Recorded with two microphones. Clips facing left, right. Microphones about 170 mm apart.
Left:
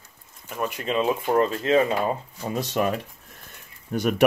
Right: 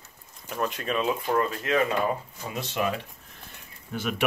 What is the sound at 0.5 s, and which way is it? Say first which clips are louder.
Speech: left 1 dB; 10° left (ahead or behind).